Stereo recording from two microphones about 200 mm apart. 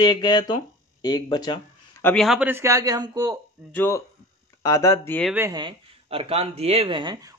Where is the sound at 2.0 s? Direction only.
10° left (ahead or behind).